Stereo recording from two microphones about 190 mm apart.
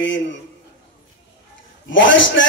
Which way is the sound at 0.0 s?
75° left (ahead or behind).